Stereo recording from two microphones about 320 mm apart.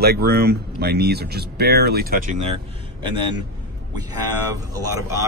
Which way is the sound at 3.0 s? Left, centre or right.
Centre.